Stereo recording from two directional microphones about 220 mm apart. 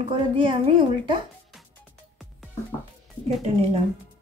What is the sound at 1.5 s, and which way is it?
Music, centre (ahead or behind).